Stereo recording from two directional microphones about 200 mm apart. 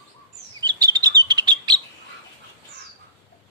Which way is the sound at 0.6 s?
20° right (ahead or behind).